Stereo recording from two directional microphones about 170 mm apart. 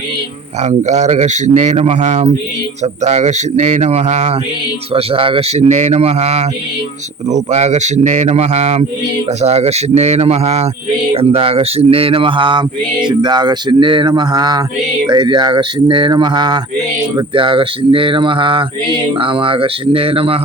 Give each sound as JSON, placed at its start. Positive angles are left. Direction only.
{"t": 0.6, "sound": "a man's voice", "side_deg": -40}
{"t": 4.9, "sound": "a man's voice", "side_deg": -30}
{"t": 11.1, "sound": "mantra", "side_deg": -35}
{"t": 19.2, "sound": "a man's voice", "side_deg": -30}